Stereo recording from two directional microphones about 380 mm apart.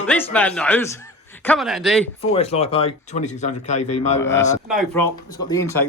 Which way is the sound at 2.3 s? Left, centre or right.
Centre.